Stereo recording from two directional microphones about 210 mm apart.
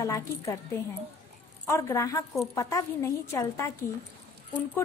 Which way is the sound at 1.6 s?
15° left (ahead or behind).